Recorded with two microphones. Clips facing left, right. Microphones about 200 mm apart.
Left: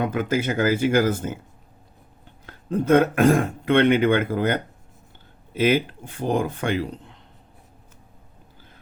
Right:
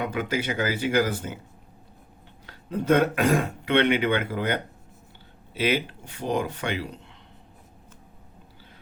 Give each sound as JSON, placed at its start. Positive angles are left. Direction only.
{"t": 0.0, "sound": "speech", "side_deg": 50}
{"t": 2.5, "sound": "speech", "side_deg": 50}
{"t": 5.5, "sound": "speech", "side_deg": 50}